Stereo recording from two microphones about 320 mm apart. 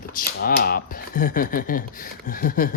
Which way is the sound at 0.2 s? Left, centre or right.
Left.